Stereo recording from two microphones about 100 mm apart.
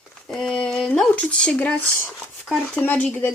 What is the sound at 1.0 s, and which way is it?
Speech, 10° left (ahead or behind).